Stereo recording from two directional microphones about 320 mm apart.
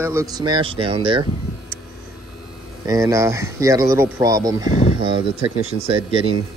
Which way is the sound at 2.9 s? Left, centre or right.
Centre.